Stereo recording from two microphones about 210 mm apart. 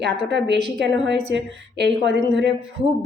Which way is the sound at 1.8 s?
55° right (ahead or behind).